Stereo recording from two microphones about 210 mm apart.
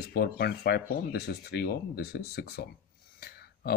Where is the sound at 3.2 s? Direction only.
50° left (ahead or behind).